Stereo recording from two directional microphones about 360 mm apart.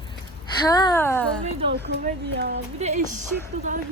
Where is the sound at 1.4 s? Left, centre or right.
Centre.